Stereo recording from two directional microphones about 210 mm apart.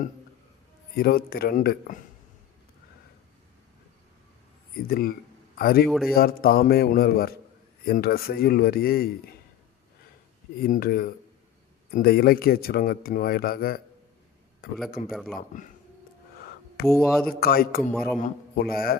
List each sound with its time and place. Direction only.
0.9 s speech: 45° left (ahead or behind)
4.9 s speech: 45° left (ahead or behind)
5.9 s speech: centre (ahead or behind)
6.1 s speech: 45° left (ahead or behind)
10.6 s speech: 45° left (ahead or behind)
14.8 s speech: 45° left (ahead or behind)
15.1 s speech: centre (ahead or behind)
16.9 s speech: centre (ahead or behind)
17.4 s speech: 45° left (ahead or behind)